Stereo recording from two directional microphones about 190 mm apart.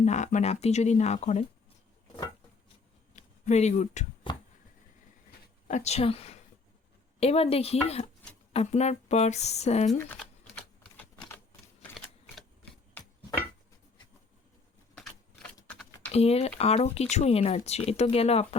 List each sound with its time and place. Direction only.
0.0 s speech: 40° left (ahead or behind)
3.4 s speech: 35° left (ahead or behind)
5.6 s speech: 35° left (ahead or behind)
11.8 s typewriter: centre (ahead or behind)
16.1 s speech: 35° left (ahead or behind)